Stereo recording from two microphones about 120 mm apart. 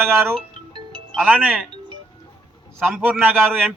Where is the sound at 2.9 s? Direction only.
15° right (ahead or behind).